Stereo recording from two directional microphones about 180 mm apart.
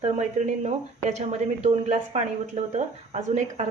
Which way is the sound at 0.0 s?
40° right (ahead or behind).